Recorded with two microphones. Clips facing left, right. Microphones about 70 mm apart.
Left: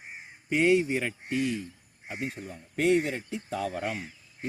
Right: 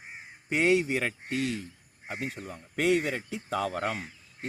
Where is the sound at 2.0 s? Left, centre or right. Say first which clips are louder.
Even; right.